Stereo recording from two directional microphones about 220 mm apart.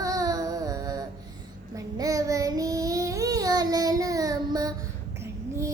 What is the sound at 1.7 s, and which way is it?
Child singing, 15° right (ahead or behind).